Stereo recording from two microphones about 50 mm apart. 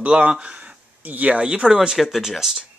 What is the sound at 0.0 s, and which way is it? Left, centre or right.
Speech, right.